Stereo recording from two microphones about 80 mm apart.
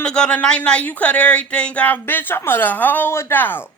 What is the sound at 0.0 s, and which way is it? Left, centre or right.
Speech, centre.